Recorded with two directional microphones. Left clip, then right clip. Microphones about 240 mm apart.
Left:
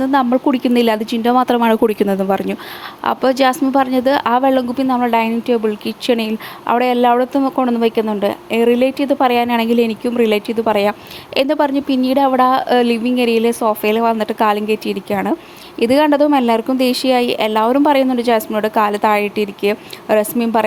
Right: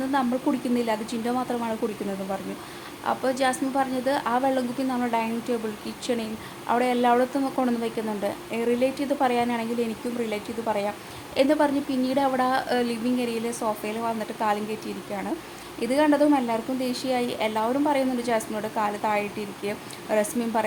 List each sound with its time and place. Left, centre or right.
0.1 s speech: left
3.0 s speech: left